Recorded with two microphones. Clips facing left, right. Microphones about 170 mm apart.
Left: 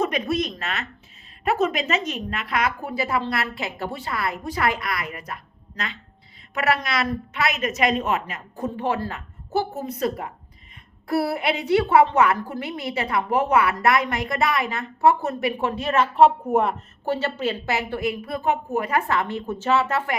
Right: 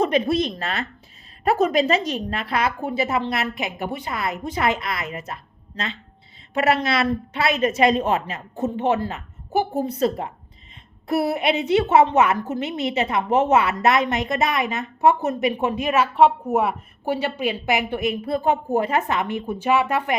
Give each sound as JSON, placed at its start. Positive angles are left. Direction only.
{"t": 0.0, "sound": "a woman's voice", "side_deg": -30}
{"t": 9.7, "sound": "a woman's voice", "side_deg": -30}
{"t": 16.1, "sound": "a woman's voice", "side_deg": 0}